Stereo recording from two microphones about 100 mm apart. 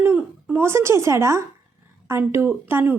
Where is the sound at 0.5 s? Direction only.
25° right (ahead or behind).